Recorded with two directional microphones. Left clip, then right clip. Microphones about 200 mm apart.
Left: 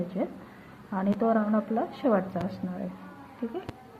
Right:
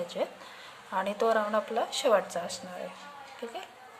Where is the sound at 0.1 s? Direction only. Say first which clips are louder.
Even; 20° right (ahead or behind).